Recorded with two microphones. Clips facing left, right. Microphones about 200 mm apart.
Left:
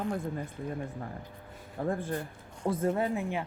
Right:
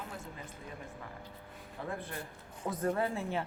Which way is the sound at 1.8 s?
45° left (ahead or behind).